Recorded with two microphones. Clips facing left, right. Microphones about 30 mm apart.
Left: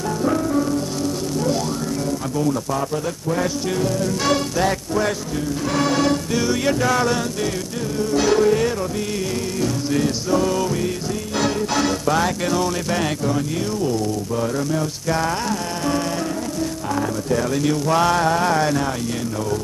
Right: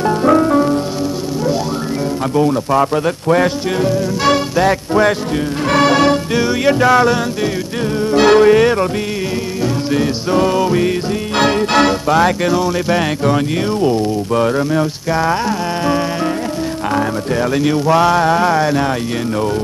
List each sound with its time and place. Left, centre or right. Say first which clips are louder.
0.0 s music: right 9 dB; right
2.3 s speech: right 10 dB; right
3.8 s music: right 7 dB; right
5.7 s music: right 8 dB; right
8.1 s music: right 8 dB; right
9.6 s music: right 4 dB; right
11.3 s music: right 8 dB; right
12.1 s speech: right 7 dB; right
13.8 s speech: right 7 dB; right
15.0 s speech: right 4 dB; right
17.4 s speech: right 7 dB; right
17.9 s speech: right 5 dB; centre